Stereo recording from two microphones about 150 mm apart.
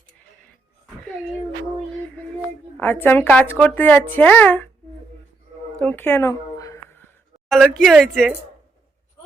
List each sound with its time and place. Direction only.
2.8 s a woman's voice: 15° left (ahead or behind)
5.8 s a sound: 15° left (ahead or behind)
7.4 s speech: centre (ahead or behind)